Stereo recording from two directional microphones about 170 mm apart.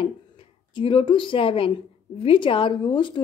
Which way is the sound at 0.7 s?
30° left (ahead or behind).